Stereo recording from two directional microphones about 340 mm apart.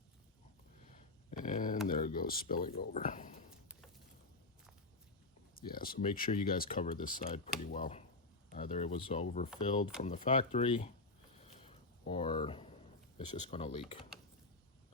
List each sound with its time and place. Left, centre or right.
0.9 s a sound: left
1.9 s speech: left
5.5 s speech: left
12.0 s speech: centre